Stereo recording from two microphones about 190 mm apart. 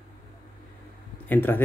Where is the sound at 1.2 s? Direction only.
10° left (ahead or behind).